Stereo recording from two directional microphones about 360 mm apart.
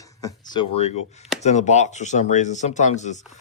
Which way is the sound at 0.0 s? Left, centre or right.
Centre.